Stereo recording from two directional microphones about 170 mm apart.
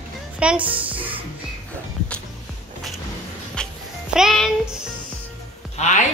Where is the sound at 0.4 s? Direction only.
5° right (ahead or behind).